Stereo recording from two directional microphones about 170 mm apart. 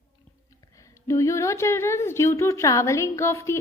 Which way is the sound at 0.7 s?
20° left (ahead or behind).